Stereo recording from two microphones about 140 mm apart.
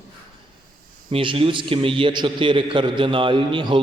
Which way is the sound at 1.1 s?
40° right (ahead or behind).